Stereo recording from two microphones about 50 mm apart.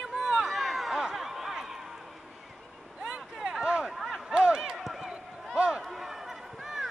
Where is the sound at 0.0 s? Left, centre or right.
Centre.